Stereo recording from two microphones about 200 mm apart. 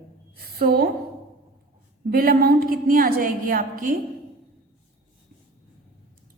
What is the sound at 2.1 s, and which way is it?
A woman's voice, 45° right (ahead or behind).